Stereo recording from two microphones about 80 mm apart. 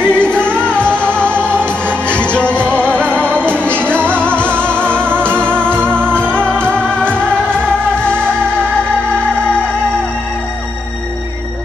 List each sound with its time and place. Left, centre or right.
0.0 s music: centre
5.8 s music: right
6.3 s music: centre